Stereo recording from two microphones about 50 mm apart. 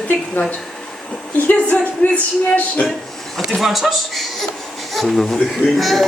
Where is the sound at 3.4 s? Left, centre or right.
Centre.